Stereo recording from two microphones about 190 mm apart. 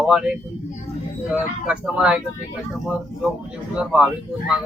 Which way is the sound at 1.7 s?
5° right (ahead or behind).